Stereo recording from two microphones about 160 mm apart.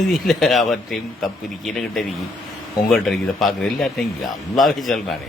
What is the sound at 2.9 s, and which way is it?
Speech, centre (ahead or behind).